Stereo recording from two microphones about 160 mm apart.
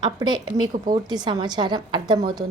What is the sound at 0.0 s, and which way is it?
Speech, 25° right (ahead or behind).